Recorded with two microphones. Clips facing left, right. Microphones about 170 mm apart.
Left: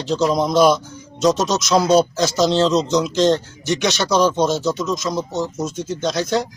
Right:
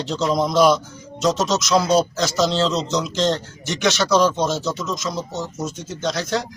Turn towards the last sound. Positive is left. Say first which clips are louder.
# left 3 dB
turn(degrees=20)  # may be behind; listen again after turning